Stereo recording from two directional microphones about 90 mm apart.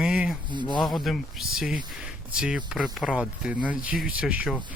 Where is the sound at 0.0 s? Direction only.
10° right (ahead or behind).